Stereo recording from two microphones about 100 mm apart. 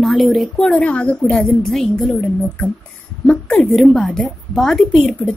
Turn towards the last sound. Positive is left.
turn(degrees=5)  # may be behind; listen again after turning